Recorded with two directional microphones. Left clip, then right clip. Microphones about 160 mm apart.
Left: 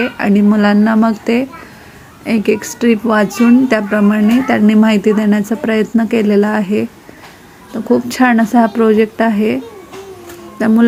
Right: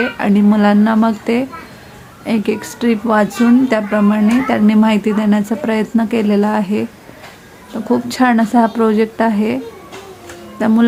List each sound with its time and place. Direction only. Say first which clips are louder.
0.0 s a woman's voice: left 1 dB; 15° left (ahead or behind)
10.6 s speech: left 1 dB; 15° left (ahead or behind)